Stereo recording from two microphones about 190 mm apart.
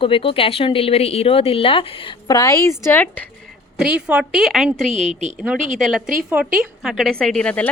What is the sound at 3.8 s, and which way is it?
A woman's voice, 5° right (ahead or behind).